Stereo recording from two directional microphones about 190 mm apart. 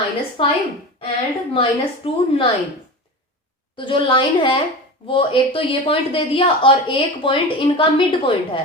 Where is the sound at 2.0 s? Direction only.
30° left (ahead or behind).